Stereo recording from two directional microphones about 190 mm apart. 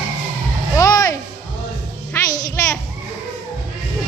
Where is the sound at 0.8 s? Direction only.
20° left (ahead or behind).